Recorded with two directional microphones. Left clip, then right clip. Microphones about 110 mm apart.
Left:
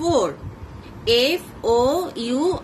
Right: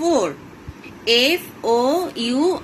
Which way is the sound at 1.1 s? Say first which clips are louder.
Right 2 dB; 30° right (ahead or behind).